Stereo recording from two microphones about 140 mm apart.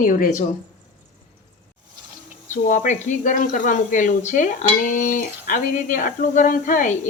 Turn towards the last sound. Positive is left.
turn(degrees=65)  # may be behind; listen again after turning